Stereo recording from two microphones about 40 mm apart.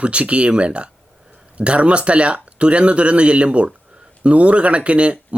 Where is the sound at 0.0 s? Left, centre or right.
Right.